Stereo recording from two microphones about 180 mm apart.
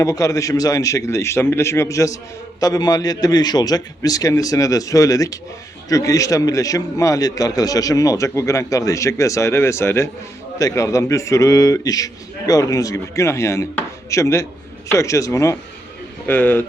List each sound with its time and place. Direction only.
0.0 s a man's voice: 20° left (ahead or behind)